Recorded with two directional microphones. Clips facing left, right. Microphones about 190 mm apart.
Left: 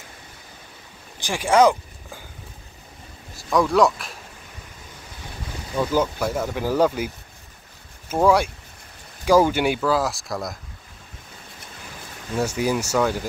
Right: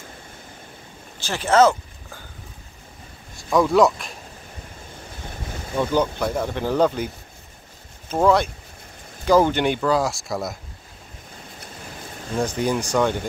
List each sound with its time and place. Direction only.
1.2 s a sound: 10° left (ahead or behind)
3.3 s speech: centre (ahead or behind)
5.8 s speech: 5° left (ahead or behind)
8.1 s speech: 10° left (ahead or behind)
12.4 s speech: 5° left (ahead or behind)